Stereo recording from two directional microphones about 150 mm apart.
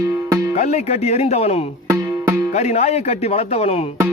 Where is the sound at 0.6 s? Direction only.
50° left (ahead or behind).